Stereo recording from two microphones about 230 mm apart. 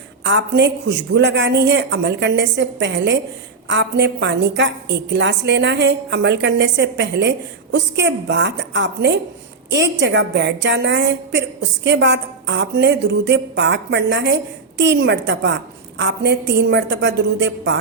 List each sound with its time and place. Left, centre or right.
0.3 s a woman's voice: right